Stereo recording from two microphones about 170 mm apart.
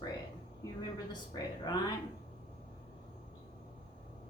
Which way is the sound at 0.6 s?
20° left (ahead or behind).